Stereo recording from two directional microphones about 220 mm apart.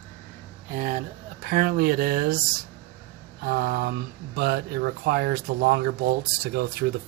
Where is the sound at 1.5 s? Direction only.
45° right (ahead or behind).